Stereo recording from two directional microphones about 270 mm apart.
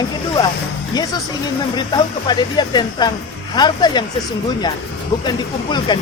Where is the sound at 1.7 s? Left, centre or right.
Centre.